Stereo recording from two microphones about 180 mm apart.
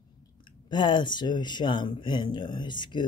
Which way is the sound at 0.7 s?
25° left (ahead or behind).